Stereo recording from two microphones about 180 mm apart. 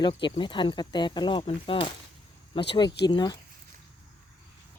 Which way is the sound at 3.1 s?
25° left (ahead or behind).